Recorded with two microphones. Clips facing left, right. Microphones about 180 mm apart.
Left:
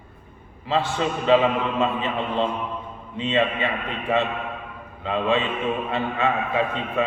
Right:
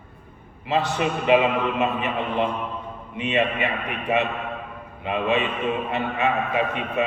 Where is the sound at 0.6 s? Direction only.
20° right (ahead or behind).